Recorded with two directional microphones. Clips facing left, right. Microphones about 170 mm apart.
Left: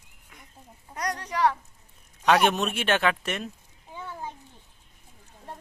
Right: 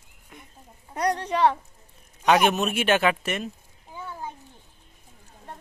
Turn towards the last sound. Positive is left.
turn(degrees=-10)  # may be behind; listen again after turning